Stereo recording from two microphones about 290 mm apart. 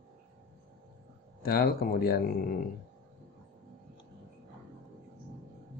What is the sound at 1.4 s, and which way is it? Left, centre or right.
Speech, left.